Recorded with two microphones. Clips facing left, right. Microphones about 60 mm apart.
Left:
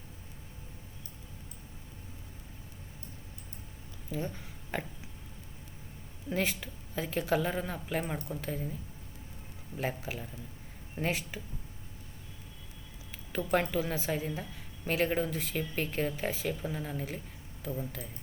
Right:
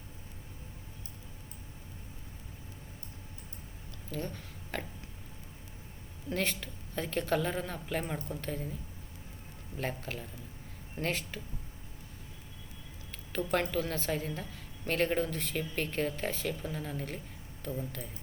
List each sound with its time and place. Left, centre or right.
4.1 s speech: centre
6.3 s a woman's voice: centre
9.7 s a woman's voice: centre
13.1 s a woman's voice: centre